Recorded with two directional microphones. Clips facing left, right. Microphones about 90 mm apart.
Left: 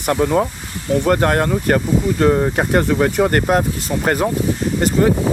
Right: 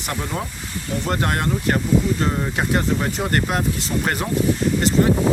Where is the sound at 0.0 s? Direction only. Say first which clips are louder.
Left 11 dB; 50° left (ahead or behind).